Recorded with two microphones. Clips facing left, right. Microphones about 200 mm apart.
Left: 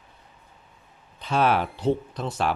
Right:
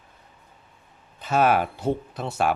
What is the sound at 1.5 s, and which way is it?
Speech, 50° right (ahead or behind).